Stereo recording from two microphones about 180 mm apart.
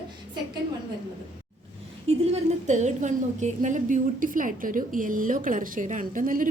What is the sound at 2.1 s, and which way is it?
A woman's voice, 40° right (ahead or behind).